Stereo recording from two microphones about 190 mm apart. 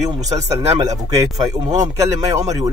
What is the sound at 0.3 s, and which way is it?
Speech, 20° right (ahead or behind).